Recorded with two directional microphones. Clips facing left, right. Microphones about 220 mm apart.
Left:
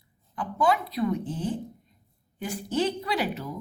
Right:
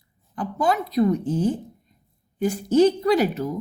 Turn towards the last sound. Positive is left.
turn(degrees=-45)  # may be behind; listen again after turning